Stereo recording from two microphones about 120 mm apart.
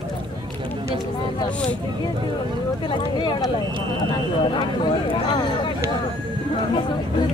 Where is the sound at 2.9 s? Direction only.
40° left (ahead or behind).